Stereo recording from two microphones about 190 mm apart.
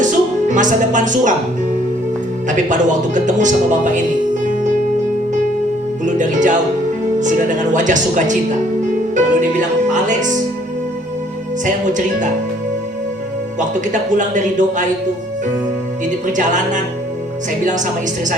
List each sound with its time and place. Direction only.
0.0 s music: 40° right (ahead or behind)
2.5 s speech: 40° right (ahead or behind)
6.1 s speech: 40° right (ahead or behind)
11.6 s speech: 40° right (ahead or behind)
13.6 s speech: 40° right (ahead or behind)
16.2 s speech: 40° right (ahead or behind)